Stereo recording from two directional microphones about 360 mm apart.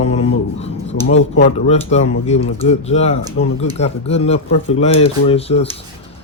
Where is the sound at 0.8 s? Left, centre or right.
Left.